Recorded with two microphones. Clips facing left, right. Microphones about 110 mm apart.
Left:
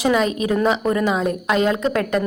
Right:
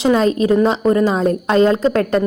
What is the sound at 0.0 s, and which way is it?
A woman's voice, 35° right (ahead or behind).